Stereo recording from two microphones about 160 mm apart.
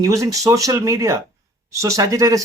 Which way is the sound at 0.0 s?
20° right (ahead or behind).